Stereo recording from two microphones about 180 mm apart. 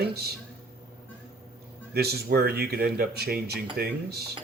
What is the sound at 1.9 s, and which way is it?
Speech, 60° right (ahead or behind).